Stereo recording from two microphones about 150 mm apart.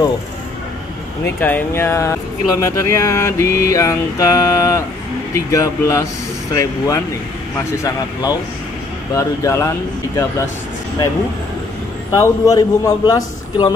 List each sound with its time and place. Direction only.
1.4 s speech: 15° left (ahead or behind)
12.1 s speech: 25° left (ahead or behind)